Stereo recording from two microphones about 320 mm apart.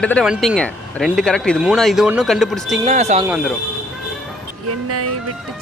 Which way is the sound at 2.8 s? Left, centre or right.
Right.